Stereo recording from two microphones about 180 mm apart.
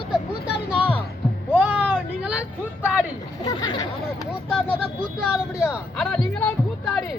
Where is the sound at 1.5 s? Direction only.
10° right (ahead or behind).